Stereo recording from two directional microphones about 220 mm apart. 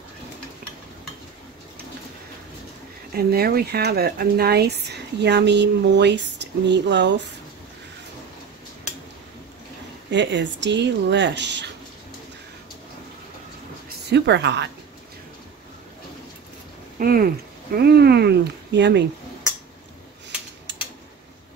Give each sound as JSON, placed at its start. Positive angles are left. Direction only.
{"t": 3.2, "sound": "speech", "side_deg": -45}
{"t": 10.1, "sound": "speech", "side_deg": -55}
{"t": 14.1, "sound": "speech", "side_deg": -50}
{"t": 17.0, "sound": "speech", "side_deg": -40}